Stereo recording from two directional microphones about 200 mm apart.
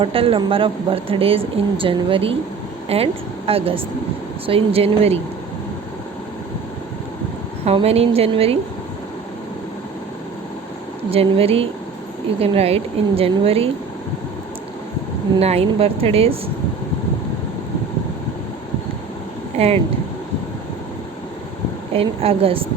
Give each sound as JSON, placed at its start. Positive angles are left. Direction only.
{"t": 0.0, "sound": "a woman's voice", "side_deg": -30}
{"t": 7.6, "sound": "a woman's voice", "side_deg": -30}
{"t": 11.1, "sound": "a woman's voice", "side_deg": -30}
{"t": 15.4, "sound": "a woman's voice", "side_deg": -30}
{"t": 19.5, "sound": "speech", "side_deg": -30}
{"t": 21.9, "sound": "a woman's voice", "side_deg": -30}